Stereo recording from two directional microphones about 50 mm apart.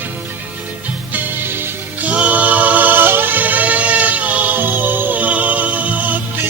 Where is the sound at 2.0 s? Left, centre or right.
Right.